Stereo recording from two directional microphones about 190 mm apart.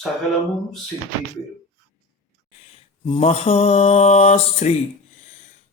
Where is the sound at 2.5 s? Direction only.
30° left (ahead or behind).